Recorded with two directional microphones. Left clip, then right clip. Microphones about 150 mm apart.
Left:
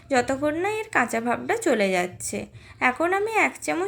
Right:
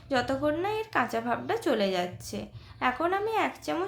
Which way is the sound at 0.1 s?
30° left (ahead or behind).